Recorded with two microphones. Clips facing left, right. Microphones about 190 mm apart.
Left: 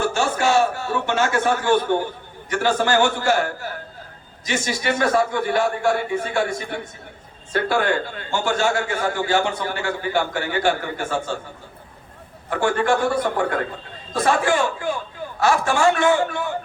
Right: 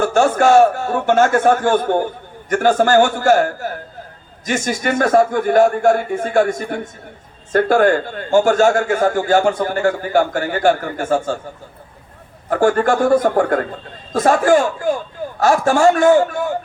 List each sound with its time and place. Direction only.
0.0 s a man's voice: 50° right (ahead or behind)
12.5 s a man's voice: 45° right (ahead or behind)